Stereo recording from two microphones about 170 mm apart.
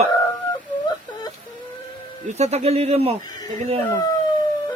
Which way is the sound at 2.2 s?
40° right (ahead or behind).